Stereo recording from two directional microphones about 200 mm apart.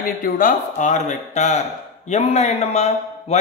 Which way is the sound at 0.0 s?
45° left (ahead or behind).